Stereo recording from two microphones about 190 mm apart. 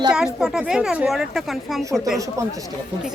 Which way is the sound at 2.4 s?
15° right (ahead or behind).